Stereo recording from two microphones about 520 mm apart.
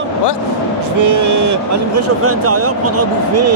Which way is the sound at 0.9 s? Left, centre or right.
Right.